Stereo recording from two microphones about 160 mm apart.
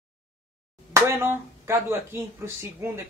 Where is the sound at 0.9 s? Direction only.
15° right (ahead or behind).